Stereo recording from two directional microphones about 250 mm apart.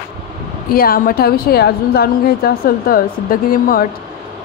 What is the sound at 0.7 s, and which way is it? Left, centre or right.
A woman's voice, left.